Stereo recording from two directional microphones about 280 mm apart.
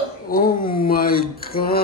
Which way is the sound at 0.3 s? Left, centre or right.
Left.